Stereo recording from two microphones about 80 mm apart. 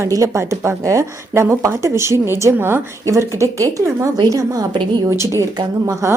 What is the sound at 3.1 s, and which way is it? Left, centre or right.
A woman's voice, right.